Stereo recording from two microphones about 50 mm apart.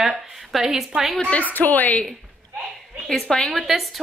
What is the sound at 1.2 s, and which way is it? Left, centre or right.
Speech, left.